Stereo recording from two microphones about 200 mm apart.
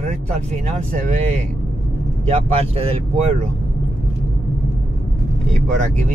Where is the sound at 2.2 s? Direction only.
30° right (ahead or behind).